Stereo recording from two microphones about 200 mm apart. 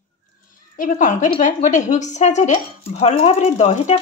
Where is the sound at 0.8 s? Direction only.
40° left (ahead or behind).